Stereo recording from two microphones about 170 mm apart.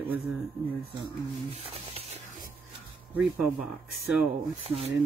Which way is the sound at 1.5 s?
35° right (ahead or behind).